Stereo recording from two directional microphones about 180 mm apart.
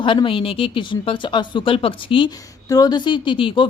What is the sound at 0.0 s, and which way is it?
Speech, 30° left (ahead or behind).